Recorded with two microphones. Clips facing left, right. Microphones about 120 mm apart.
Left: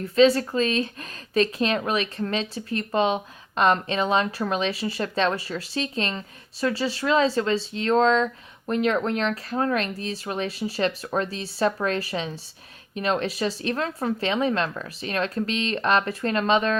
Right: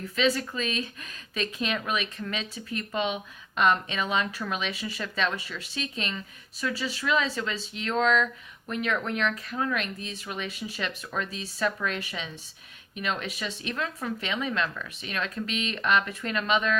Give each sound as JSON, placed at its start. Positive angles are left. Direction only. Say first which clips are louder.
{"t": 0.0, "sound": "speech", "louder": "left 8 dB", "side_deg": 30}